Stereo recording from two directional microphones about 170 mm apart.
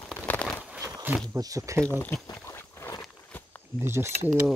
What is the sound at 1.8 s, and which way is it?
Speech, 10° left (ahead or behind).